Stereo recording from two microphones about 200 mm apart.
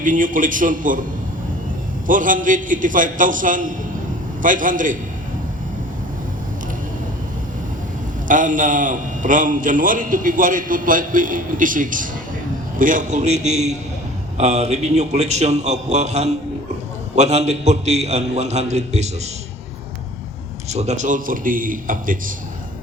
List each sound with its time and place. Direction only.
0.0 s a man's voice: 40° right (ahead or behind)
2.0 s a man's voice: 40° right (ahead or behind)
8.3 s a man's voice: 40° right (ahead or behind)
20.7 s a man's voice: 35° right (ahead or behind)